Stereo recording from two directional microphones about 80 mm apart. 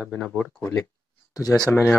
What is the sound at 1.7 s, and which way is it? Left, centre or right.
Speech, left.